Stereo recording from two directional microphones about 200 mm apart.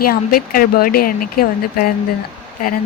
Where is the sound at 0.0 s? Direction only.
45° left (ahead or behind).